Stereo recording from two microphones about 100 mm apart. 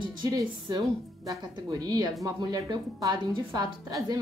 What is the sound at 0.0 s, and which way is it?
A woman's voice, 45° right (ahead or behind).